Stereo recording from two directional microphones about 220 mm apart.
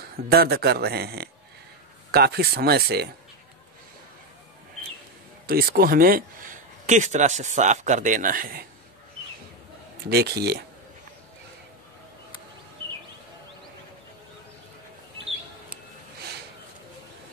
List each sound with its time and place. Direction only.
0.3 s a man's voice: 45° right (ahead or behind)
5.5 s speech: 45° right (ahead or behind)
10.0 s a man's voice: 45° right (ahead or behind)